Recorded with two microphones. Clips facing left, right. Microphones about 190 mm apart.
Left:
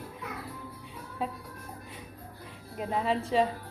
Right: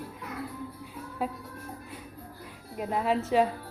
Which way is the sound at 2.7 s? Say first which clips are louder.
Right 2 dB; 5° right (ahead or behind).